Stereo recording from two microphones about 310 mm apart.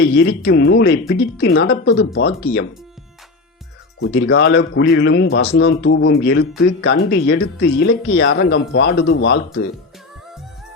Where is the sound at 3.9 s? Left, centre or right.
Left.